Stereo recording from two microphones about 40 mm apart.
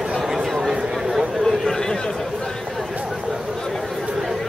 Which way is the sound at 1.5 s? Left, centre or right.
Centre.